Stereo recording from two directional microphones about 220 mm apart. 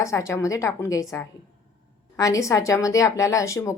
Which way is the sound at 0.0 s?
15° left (ahead or behind).